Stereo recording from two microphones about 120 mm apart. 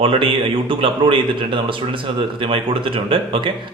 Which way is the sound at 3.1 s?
45° right (ahead or behind).